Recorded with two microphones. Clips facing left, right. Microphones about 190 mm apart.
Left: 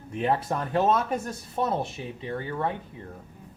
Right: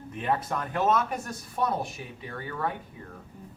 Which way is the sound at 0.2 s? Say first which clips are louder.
Left 3 dB; 30° left (ahead or behind).